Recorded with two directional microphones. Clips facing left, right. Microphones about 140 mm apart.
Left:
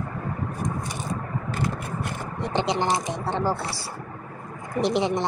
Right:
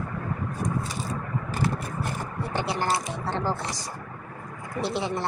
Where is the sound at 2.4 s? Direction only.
20° left (ahead or behind).